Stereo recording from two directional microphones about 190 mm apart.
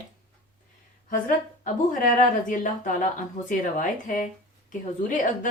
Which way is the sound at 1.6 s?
45° left (ahead or behind).